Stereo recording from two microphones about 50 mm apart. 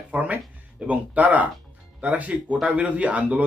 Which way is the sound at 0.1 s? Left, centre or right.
Right.